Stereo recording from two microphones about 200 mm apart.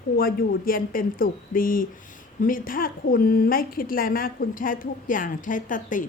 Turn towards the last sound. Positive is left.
turn(degrees=40)  # may be behind; listen again after turning